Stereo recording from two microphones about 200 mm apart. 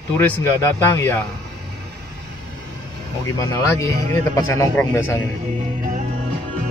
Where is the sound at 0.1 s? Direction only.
10° left (ahead or behind).